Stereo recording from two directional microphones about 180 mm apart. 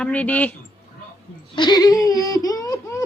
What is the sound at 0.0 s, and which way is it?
Speech, 10° left (ahead or behind).